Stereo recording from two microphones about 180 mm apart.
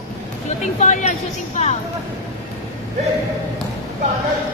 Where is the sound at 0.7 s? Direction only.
40° left (ahead or behind).